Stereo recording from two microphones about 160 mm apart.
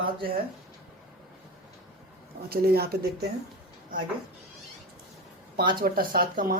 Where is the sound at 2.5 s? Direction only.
75° right (ahead or behind).